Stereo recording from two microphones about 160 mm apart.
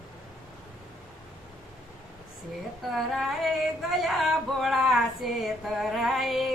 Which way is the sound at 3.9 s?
Centre (ahead or behind).